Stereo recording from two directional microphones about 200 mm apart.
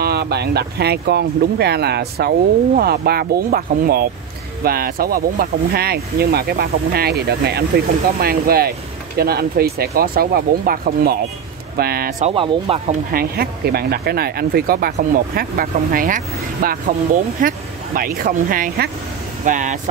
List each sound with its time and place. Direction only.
0.0 s speech: 55° right (ahead or behind)
12.3 s speech: 30° right (ahead or behind)
13.1 s speech: 50° right (ahead or behind)